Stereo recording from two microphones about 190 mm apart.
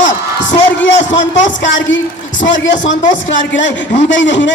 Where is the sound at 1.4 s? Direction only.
75° left (ahead or behind).